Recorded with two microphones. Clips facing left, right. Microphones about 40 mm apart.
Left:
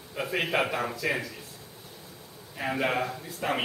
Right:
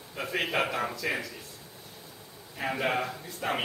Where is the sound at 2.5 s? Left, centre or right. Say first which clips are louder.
Left 1 dB; centre.